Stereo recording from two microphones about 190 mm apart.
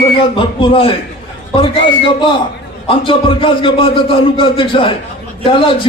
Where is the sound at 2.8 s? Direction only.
25° left (ahead or behind).